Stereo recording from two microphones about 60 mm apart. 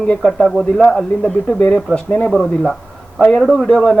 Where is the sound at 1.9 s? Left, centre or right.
Centre.